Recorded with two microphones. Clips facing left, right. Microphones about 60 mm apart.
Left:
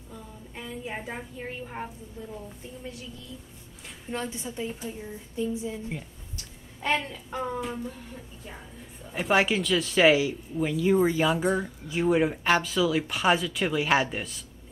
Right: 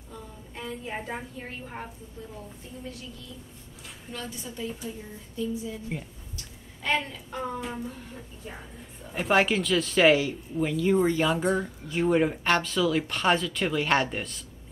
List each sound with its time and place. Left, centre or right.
0.1 s a woman's voice: centre
4.1 s speech: left
6.8 s speech: left
7.2 s speech: centre
9.0 s speech: centre